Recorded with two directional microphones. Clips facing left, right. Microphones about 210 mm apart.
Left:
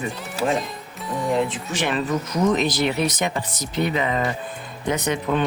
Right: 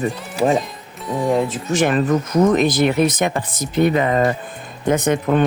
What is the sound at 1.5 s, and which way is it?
Speech, 45° right (ahead or behind).